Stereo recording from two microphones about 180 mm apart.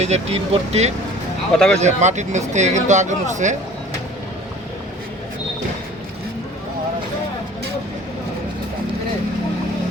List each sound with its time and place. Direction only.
0.0 s speech: 35° right (ahead or behind)
1.5 s speech: 5° left (ahead or behind)
1.8 s speech: 40° right (ahead or behind)